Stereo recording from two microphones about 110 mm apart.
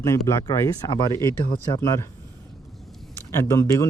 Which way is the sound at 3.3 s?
25° left (ahead or behind).